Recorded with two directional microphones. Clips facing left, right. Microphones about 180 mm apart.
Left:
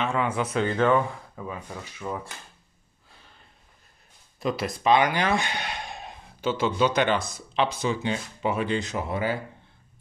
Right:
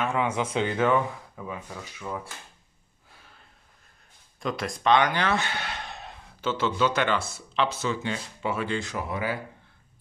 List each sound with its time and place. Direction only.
0.0 s a sound: 15° right (ahead or behind)
0.5 s speech: 15° right (ahead or behind)
1.8 s speech: 15° left (ahead or behind)
4.4 s speech: 5° left (ahead or behind); by 9.4 s 30° left (ahead or behind)